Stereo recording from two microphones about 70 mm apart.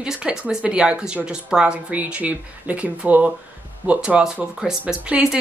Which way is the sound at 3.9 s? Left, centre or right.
Centre.